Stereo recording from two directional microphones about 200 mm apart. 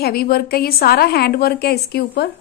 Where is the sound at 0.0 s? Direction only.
50° left (ahead or behind).